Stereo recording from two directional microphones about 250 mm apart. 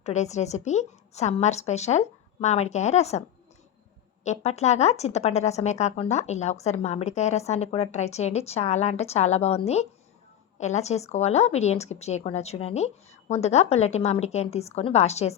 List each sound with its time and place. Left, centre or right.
0.0 s speech: left